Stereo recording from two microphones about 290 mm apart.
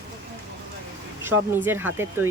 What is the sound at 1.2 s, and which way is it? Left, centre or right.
Speech, centre.